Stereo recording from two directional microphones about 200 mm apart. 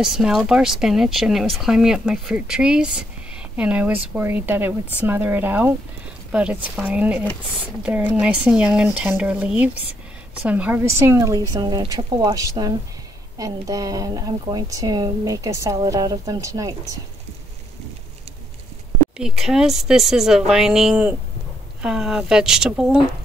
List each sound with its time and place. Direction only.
0.0 s speech: centre (ahead or behind)
19.1 s speech: 5° right (ahead or behind)